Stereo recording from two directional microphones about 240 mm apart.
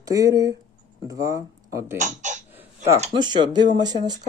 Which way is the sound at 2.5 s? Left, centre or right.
Centre.